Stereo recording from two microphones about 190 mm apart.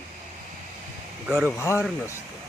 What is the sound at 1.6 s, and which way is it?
Speech, 15° left (ahead or behind).